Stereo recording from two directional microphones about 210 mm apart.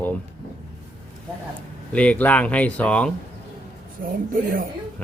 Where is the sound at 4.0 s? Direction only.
40° right (ahead or behind).